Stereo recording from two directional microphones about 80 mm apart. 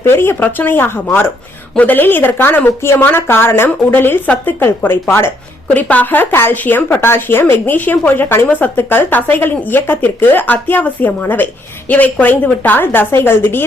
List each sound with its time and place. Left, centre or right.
0.0 s a woman's voice: left
5.7 s a woman's voice: left